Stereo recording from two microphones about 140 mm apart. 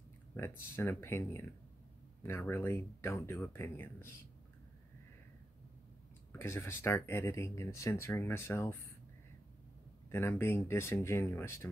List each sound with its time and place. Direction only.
0.6 s speech: 15° left (ahead or behind)
6.3 s speech: 15° left (ahead or behind)
10.1 s speech: 15° left (ahead or behind)